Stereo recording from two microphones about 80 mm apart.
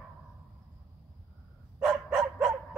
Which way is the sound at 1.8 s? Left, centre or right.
Centre.